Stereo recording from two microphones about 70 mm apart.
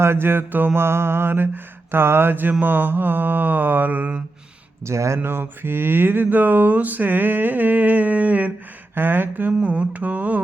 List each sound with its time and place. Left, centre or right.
0.0 s mantra: right
4.9 s mantra: right